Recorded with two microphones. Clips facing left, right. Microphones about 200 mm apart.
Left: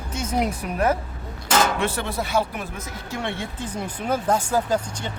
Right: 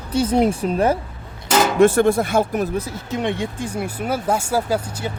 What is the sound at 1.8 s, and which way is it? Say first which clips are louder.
Speech: right 12 dB; 45° right (ahead or behind).